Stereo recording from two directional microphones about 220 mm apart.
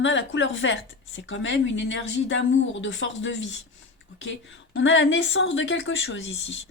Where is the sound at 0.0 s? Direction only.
55° left (ahead or behind).